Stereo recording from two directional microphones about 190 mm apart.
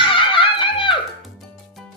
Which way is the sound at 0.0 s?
25° left (ahead or behind).